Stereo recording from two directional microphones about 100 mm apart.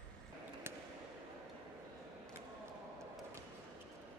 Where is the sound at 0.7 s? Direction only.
25° right (ahead or behind).